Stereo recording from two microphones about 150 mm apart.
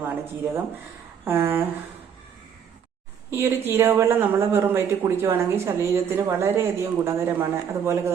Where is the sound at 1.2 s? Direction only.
15° right (ahead or behind).